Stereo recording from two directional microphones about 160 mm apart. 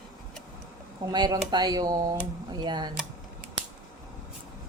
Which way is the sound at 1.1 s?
25° right (ahead or behind).